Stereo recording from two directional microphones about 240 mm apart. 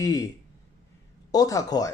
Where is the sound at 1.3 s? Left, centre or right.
Centre.